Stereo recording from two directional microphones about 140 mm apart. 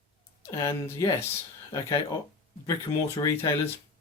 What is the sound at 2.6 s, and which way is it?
Speech, 20° left (ahead or behind).